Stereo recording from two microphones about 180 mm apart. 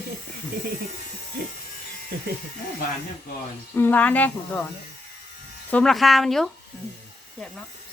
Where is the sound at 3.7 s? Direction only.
10° left (ahead or behind).